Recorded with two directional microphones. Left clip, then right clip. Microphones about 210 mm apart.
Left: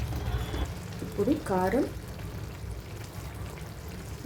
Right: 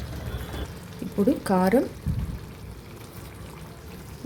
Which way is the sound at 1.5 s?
40° right (ahead or behind).